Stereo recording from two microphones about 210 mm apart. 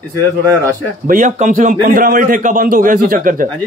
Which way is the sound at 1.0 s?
40° right (ahead or behind).